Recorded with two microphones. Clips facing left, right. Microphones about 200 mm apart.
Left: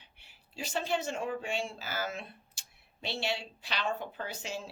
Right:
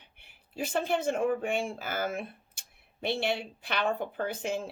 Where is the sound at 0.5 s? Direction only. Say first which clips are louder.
Right 4 dB; 55° right (ahead or behind).